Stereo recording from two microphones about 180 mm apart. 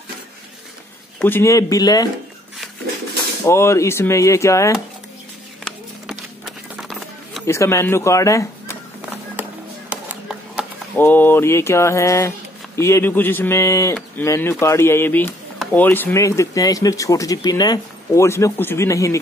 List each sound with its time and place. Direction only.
1.2 s speech: 15° left (ahead or behind)
3.4 s speech: 15° left (ahead or behind)
5.6 s a sound: centre (ahead or behind)
7.4 s speech: 15° left (ahead or behind)
9.4 s music: 10° right (ahead or behind)
11.0 s speech: 10° left (ahead or behind)